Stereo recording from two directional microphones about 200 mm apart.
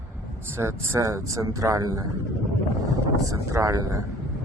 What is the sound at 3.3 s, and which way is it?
Speech, 15° right (ahead or behind).